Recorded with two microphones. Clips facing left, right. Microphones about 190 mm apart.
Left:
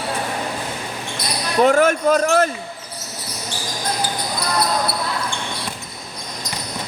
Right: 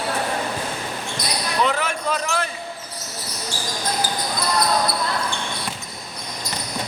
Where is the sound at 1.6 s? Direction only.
50° left (ahead or behind).